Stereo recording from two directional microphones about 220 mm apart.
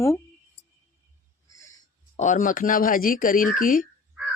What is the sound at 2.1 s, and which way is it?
Speech, 35° left (ahead or behind).